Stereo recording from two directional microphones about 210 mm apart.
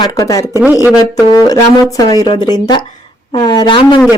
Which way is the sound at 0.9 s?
20° left (ahead or behind).